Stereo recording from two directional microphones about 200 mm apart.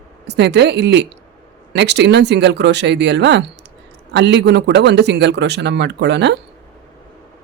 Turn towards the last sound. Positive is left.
turn(degrees=-55)  # may be behind; listen again after turning